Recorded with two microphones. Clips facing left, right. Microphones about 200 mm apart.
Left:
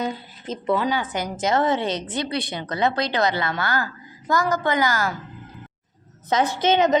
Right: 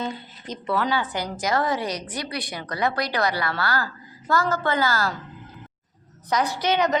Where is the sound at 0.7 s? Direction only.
15° left (ahead or behind).